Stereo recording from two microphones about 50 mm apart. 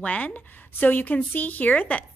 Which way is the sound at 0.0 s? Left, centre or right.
Left.